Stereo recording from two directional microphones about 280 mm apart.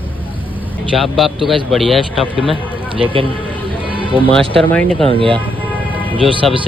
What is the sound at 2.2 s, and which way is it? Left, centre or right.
Speech, centre.